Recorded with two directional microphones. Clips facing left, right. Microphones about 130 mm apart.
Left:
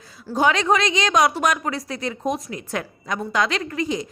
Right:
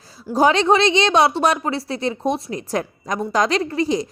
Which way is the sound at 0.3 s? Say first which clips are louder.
Right 4 dB; 35° right (ahead or behind).